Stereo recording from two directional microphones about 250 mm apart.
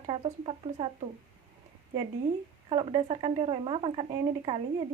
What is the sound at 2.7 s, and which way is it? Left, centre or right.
Speech, right.